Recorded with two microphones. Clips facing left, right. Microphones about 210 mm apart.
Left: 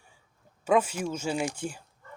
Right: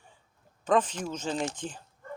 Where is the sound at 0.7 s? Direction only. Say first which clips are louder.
Left 1 dB; 10° left (ahead or behind).